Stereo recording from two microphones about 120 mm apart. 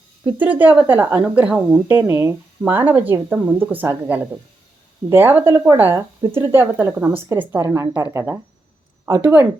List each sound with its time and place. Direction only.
0.3 s speech: 15° right (ahead or behind)